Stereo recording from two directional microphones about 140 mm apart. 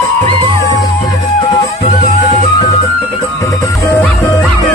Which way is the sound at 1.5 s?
50° left (ahead or behind).